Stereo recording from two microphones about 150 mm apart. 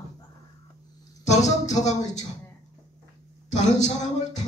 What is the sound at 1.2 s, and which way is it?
Speech, 50° left (ahead or behind).